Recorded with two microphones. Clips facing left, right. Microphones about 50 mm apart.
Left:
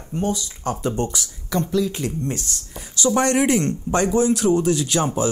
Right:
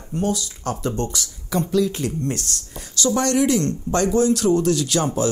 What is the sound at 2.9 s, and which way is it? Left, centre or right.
Speech, left.